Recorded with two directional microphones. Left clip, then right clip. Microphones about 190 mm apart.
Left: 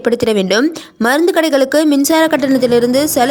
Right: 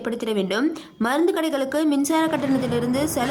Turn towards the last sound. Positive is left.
turn(degrees=25)  # may be behind; listen again after turning